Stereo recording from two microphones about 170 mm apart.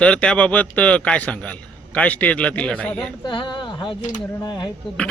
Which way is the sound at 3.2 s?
30° left (ahead or behind).